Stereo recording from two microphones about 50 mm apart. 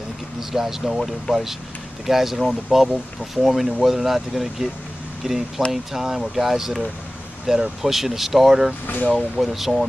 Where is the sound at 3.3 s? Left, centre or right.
Centre.